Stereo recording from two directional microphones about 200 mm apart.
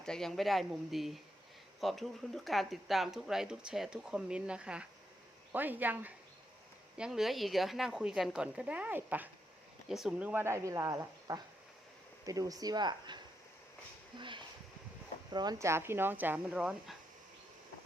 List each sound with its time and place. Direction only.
0.0 s speech: 5° left (ahead or behind)